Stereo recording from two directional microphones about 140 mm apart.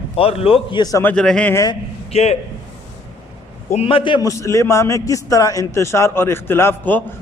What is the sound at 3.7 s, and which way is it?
Speech, 45° left (ahead or behind).